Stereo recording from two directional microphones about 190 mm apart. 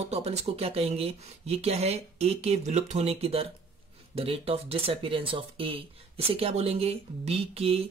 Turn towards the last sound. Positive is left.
turn(degrees=-30)  # may be behind; listen again after turning